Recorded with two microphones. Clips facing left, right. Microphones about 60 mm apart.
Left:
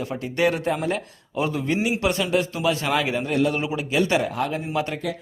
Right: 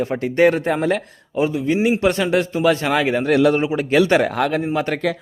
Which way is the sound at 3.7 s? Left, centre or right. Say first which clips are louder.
Right 7 dB; right.